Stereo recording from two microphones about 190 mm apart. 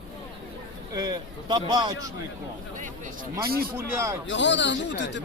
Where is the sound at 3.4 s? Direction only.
55° right (ahead or behind).